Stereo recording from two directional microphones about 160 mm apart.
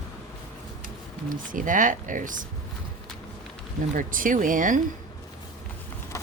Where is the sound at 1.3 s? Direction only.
55° right (ahead or behind).